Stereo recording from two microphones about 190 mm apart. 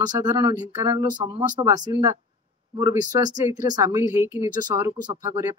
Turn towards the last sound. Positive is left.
turn(degrees=-15)  # may be behind; listen again after turning